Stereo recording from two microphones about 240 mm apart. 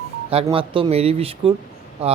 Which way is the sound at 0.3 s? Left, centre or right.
Right.